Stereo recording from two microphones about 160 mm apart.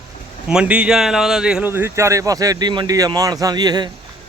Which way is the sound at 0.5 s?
5° right (ahead or behind).